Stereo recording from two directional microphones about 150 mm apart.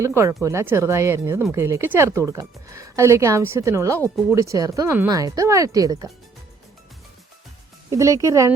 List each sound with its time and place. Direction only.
0.0 s speech: 20° right (ahead or behind)
7.9 s speech: 20° right (ahead or behind)